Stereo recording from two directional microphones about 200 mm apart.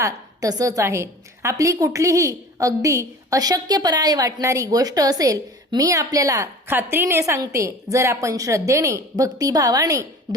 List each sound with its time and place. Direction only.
0.0 s a woman's voice: 15° right (ahead or behind)